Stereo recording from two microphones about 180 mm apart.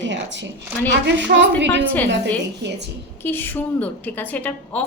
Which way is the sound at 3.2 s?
10° left (ahead or behind).